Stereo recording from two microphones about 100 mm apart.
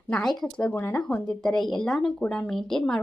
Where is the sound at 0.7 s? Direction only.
20° left (ahead or behind).